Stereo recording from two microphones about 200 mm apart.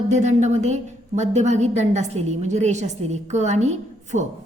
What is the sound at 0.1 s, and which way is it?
A woman's voice, 35° right (ahead or behind).